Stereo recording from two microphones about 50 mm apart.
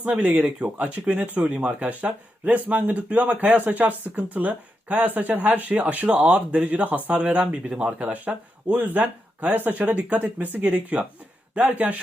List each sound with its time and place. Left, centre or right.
0.0 s speech: right
9.7 s speech: right